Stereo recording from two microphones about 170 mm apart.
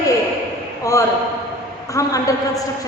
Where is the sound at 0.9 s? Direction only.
20° left (ahead or behind).